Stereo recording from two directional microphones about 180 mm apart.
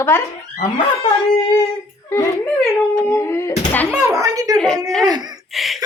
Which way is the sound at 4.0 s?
15° right (ahead or behind).